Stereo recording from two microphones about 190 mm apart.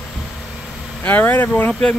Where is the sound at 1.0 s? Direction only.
10° left (ahead or behind).